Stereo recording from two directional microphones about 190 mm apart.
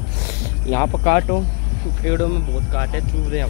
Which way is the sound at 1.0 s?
45° left (ahead or behind).